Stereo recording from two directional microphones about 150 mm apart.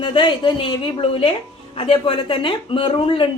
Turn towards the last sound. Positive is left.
turn(degrees=35)  # may be behind; listen again after turning